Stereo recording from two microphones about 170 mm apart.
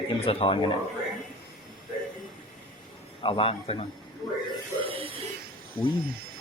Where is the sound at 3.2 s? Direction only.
30° left (ahead or behind).